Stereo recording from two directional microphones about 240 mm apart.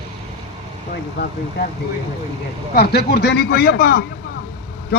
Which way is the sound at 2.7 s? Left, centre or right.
Left.